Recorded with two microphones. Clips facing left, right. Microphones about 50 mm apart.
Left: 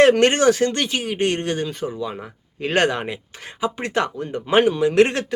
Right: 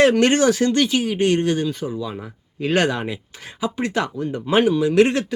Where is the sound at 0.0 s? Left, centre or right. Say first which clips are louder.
Left 1 dB; left.